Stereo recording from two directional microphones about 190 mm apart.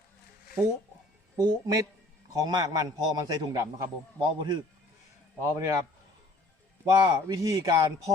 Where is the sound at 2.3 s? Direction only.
20° right (ahead or behind).